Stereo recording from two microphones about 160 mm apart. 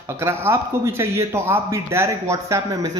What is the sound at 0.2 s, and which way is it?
Speech, 15° right (ahead or behind).